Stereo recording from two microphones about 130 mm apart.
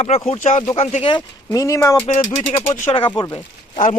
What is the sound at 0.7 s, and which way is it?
Speech, 50° left (ahead or behind).